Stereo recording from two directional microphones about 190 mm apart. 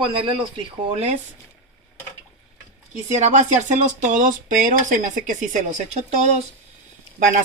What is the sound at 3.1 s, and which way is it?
Speech, 40° right (ahead or behind).